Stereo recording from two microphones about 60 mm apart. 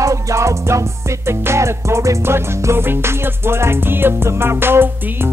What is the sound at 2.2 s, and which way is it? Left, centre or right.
Music, right.